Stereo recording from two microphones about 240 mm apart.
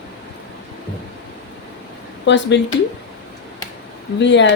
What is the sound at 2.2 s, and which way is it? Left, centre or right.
Speech, left.